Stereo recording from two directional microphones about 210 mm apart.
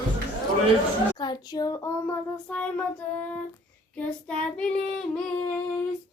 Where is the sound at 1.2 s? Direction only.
20° left (ahead or behind).